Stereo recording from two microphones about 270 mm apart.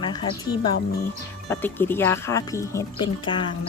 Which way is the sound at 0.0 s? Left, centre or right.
Centre.